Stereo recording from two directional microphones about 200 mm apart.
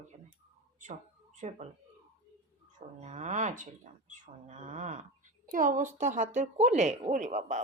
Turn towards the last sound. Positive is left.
turn(degrees=-35)  # may be behind; listen again after turning